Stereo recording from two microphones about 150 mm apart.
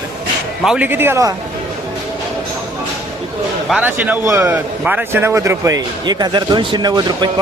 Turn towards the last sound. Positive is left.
turn(degrees=-30)  # may be behind; listen again after turning